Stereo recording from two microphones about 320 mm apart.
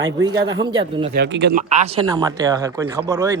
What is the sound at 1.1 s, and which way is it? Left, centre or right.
Speech, right.